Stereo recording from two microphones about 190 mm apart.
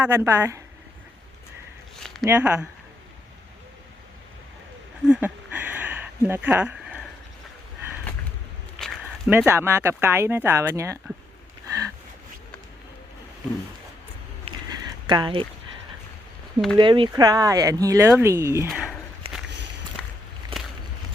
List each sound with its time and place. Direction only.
0.0 s speech: 15° right (ahead or behind)
2.2 s speech: 10° right (ahead or behind)
5.0 s a sound: 5° right (ahead or behind)
8.8 s a sound: centre (ahead or behind)
9.3 s speech: 10° right (ahead or behind)
15.0 s speech: 25° right (ahead or behind)
16.7 s speech: 25° right (ahead or behind)
18.7 s speech: centre (ahead or behind)
20.5 s a sound: 30° right (ahead or behind)